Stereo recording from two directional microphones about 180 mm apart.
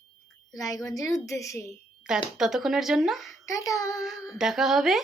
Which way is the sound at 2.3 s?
Centre (ahead or behind).